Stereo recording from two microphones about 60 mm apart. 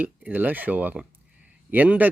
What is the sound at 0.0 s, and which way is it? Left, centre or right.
Speech, right.